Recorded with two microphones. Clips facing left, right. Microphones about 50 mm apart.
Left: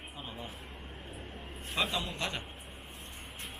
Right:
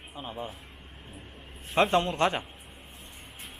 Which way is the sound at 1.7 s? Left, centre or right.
Right.